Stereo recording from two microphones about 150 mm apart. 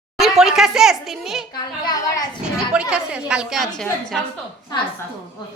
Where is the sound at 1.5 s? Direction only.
25° left (ahead or behind).